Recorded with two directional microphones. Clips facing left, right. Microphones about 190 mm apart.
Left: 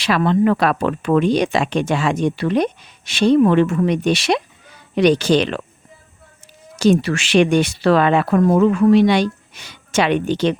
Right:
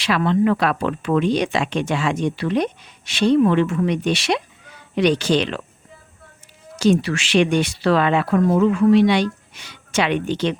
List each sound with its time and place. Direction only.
0.0 s speech: 40° left (ahead or behind)
6.7 s speech: 45° left (ahead or behind)